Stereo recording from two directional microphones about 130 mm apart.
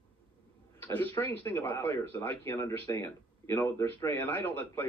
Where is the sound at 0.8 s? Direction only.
15° left (ahead or behind).